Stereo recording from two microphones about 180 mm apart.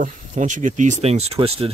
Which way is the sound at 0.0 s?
45° right (ahead or behind).